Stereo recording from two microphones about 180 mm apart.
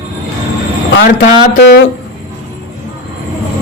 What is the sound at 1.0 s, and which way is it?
Speech, 70° left (ahead or behind).